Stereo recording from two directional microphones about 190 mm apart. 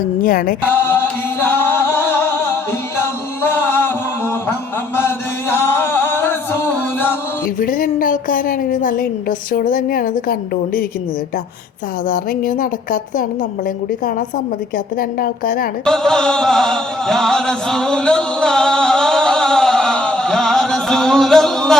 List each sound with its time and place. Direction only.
0.2 s a woman's voice: 45° left (ahead or behind)
1.4 s music: 10° left (ahead or behind)
4.9 s music: 10° left (ahead or behind)
7.4 s a sound: 45° left (ahead or behind)
9.5 s a woman's voice: 45° left (ahead or behind)
12.0 s a woman's voice: 45° left (ahead or behind)
15.2 s a woman's voice: 50° left (ahead or behind)
15.9 s chant: 5° left (ahead or behind)